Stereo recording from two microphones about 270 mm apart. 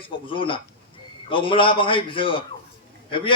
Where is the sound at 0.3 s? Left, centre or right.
Centre.